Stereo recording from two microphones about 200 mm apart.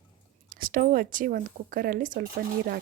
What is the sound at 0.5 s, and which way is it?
A woman's voice, 45° right (ahead or behind).